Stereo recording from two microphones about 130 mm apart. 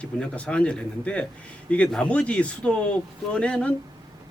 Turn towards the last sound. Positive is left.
turn(degrees=10)  # may be behind; listen again after turning